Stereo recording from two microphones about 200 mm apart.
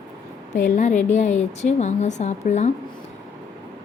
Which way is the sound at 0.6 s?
40° left (ahead or behind).